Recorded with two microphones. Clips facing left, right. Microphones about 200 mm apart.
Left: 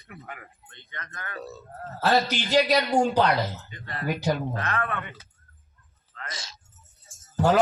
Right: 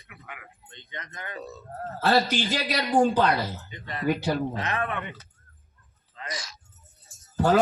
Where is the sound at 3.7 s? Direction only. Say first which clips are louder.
Right 4 dB; 20° right (ahead or behind).